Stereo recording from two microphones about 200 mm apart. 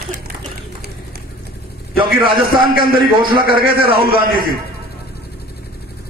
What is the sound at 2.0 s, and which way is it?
Speech, 25° right (ahead or behind).